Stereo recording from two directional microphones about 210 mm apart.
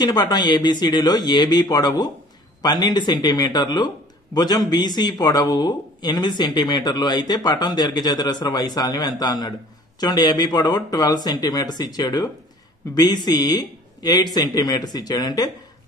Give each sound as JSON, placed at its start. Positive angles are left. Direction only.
{"t": 0.0, "sound": "speech", "side_deg": 20}